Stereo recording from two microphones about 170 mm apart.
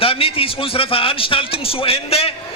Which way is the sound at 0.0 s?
35° left (ahead or behind).